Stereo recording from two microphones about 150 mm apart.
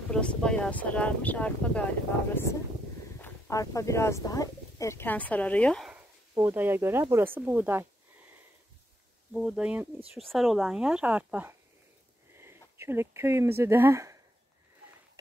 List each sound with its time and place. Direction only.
0.1 s speech: 5° left (ahead or behind)
5.9 s speech: 10° right (ahead or behind)
9.3 s speech: 5° right (ahead or behind)